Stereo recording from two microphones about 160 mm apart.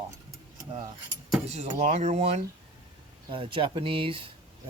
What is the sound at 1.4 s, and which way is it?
Speech, 45° right (ahead or behind).